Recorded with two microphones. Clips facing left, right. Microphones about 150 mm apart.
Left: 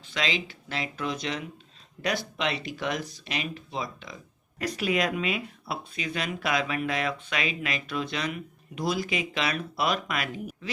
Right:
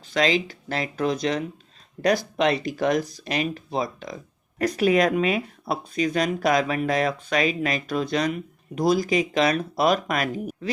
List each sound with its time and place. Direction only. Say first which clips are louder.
0.1 s speech: right 9 dB; 40° right (ahead or behind)